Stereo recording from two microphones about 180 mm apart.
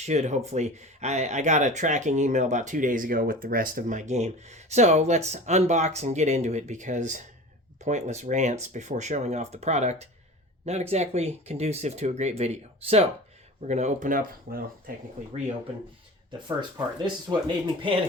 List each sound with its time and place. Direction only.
0.0 s speech: 40° right (ahead or behind)
16.6 s speech: 25° right (ahead or behind)